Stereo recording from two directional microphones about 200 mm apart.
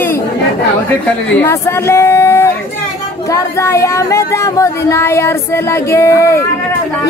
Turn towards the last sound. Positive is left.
turn(degrees=15)  # may be behind; listen again after turning